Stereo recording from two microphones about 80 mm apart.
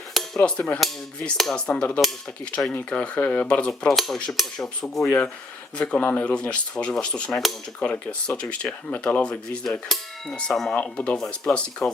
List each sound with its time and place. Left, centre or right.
0.3 s speech: centre
1.4 s cutlery: centre
1.7 s speech: centre
3.8 s cutlery: centre
5.0 s speech: centre
10.5 s cutlery: centre
10.8 s speech: centre